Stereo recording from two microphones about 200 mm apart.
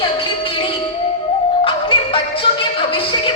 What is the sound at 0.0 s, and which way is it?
Music, 25° left (ahead or behind).